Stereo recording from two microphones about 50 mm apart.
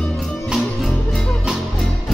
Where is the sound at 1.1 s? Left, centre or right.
Centre.